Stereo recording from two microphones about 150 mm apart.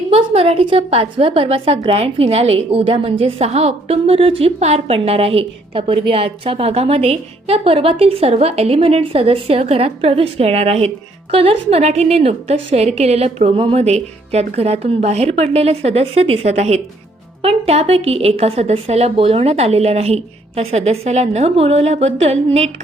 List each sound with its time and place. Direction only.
0.1 s a woman's voice: 40° right (ahead or behind)